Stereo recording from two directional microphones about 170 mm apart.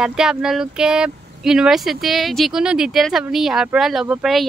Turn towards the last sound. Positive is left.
turn(degrees=0)  # may be behind; listen again after turning